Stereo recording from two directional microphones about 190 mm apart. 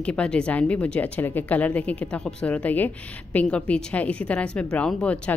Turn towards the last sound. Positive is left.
turn(degrees=5)  # may be behind; listen again after turning